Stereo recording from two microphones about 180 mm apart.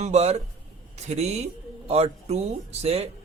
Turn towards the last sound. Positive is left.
turn(degrees=-35)  # may be behind; listen again after turning